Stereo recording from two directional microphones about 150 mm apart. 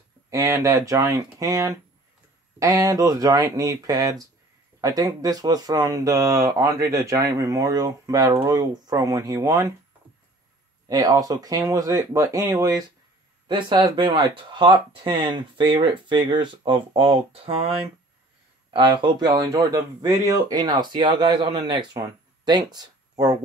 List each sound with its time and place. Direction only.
0.3 s speech: 20° right (ahead or behind)
10.9 s speech: 25° right (ahead or behind)